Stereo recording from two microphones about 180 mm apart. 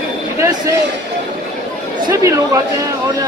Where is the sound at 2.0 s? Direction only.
15° right (ahead or behind).